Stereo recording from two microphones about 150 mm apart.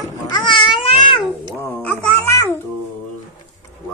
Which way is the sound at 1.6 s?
10° left (ahead or behind).